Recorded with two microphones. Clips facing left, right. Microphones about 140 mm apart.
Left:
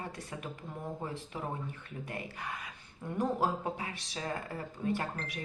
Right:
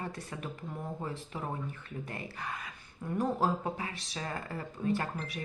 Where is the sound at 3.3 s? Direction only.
15° left (ahead or behind).